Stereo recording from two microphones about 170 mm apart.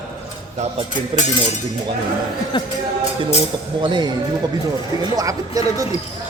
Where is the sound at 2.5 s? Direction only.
30° left (ahead or behind).